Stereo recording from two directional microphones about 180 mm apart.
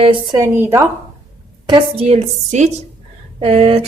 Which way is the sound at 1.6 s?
30° right (ahead or behind).